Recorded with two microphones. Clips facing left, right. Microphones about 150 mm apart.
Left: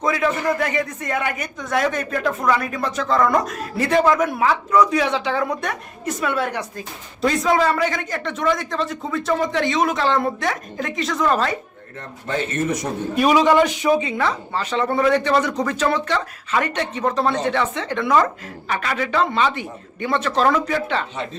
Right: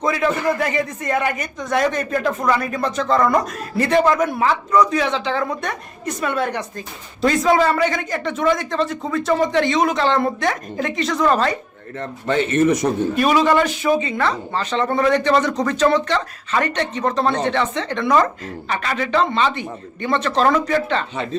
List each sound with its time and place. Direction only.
0.0 s a man's voice: centre (ahead or behind)
11.9 s a man's voice: 85° right
13.1 s speech: 10° left (ahead or behind)